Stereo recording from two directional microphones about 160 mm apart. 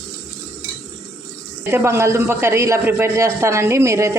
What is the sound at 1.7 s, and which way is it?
Speech, 15° right (ahead or behind).